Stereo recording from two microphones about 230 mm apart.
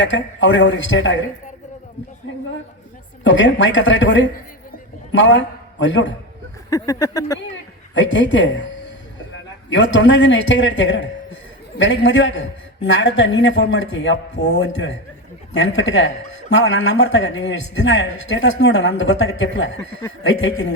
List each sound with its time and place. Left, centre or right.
0.0 s speech: left
3.2 s a man's voice: left
6.7 s speech: centre
7.9 s a man's voice: left